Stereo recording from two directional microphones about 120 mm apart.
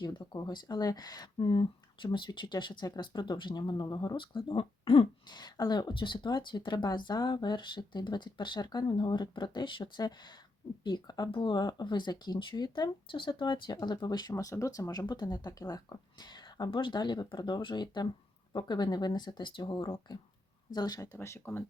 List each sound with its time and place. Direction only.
0.0 s speech: 35° left (ahead or behind)
5.4 s speech: 35° left (ahead or behind)